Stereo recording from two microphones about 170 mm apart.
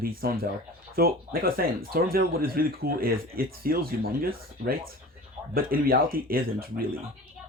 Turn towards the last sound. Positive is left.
turn(degrees=-60)  # may be behind; listen again after turning